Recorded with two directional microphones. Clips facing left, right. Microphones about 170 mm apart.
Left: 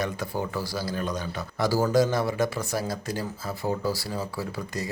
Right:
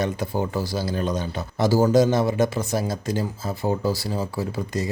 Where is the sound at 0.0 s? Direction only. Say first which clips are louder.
Right 5 dB; 25° right (ahead or behind).